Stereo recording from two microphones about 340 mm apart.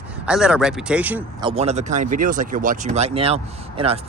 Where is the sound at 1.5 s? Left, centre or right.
Centre.